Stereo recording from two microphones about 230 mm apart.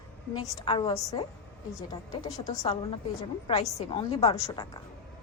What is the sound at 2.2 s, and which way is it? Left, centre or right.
A woman's voice, left.